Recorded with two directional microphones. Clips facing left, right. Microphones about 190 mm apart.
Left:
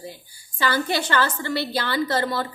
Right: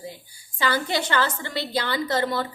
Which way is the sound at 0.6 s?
20° right (ahead or behind).